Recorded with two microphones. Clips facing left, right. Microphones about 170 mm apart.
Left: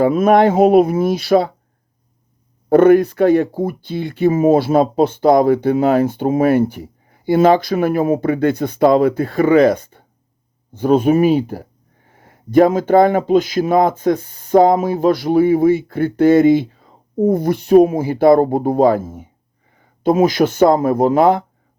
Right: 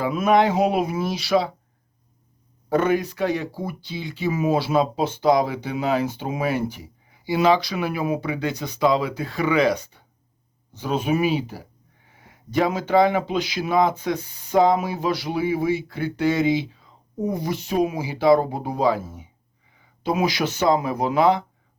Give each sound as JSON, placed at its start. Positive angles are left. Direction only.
{"t": 0.0, "sound": "speech", "side_deg": 50}
{"t": 2.6, "sound": "speech", "side_deg": 55}